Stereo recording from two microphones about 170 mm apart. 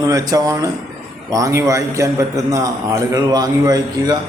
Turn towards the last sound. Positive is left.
turn(degrees=-25)  # may be behind; listen again after turning